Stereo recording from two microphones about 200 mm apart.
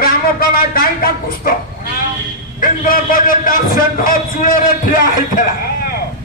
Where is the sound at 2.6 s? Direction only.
45° left (ahead or behind).